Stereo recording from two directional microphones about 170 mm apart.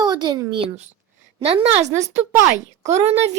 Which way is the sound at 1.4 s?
35° right (ahead or behind).